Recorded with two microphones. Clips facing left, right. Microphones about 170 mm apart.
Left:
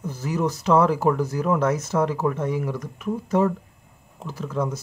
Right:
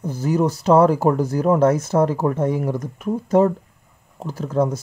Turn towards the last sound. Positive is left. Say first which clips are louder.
# right 6 dB
turn(degrees=-45)  # may be behind; listen again after turning